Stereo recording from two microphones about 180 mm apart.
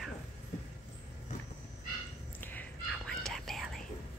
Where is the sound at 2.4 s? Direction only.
10° left (ahead or behind).